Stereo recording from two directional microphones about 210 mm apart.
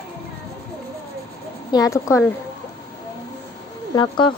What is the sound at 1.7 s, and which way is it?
Speech, 15° left (ahead or behind).